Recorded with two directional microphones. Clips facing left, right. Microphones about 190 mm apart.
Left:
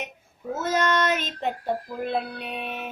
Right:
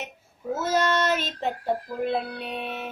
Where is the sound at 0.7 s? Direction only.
50° left (ahead or behind).